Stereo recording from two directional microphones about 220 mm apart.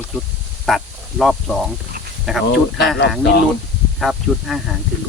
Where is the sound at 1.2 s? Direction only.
Centre (ahead or behind).